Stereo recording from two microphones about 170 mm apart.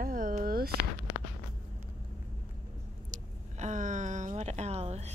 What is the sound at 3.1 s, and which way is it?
Speech, 45° right (ahead or behind).